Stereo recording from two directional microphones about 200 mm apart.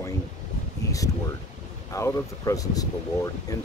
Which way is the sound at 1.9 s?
15° left (ahead or behind).